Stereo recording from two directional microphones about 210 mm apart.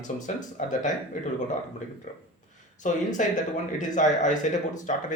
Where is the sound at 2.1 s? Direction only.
35° left (ahead or behind).